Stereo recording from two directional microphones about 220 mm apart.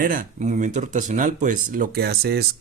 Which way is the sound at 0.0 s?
40° right (ahead or behind).